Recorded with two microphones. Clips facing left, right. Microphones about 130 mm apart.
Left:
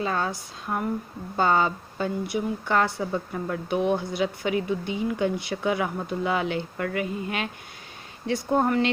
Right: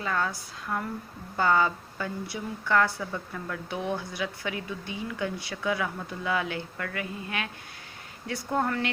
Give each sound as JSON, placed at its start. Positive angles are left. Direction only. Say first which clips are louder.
{"t": 0.0, "sound": "speech", "louder": "left 3 dB", "side_deg": 25}